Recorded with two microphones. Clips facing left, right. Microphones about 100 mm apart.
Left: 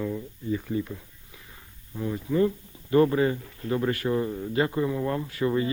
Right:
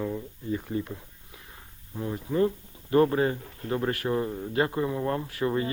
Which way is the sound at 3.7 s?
Centre (ahead or behind).